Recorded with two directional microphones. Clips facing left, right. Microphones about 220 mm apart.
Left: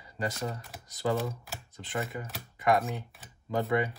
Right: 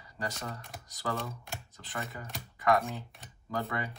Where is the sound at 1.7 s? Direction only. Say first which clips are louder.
Left 7 dB; 20° left (ahead or behind).